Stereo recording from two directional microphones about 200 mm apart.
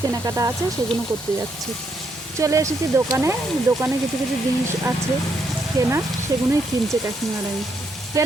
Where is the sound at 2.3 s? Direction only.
15° right (ahead or behind).